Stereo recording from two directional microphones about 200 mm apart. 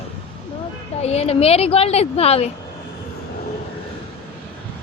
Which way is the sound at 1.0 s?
30° left (ahead or behind).